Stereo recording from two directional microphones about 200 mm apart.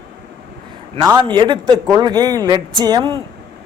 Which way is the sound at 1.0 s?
20° right (ahead or behind).